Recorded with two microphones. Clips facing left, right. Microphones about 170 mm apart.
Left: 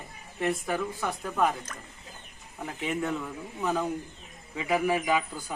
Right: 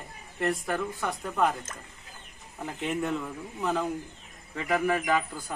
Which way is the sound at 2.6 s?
Centre (ahead or behind).